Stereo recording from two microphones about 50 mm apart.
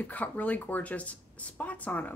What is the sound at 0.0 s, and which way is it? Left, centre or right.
Speech, left.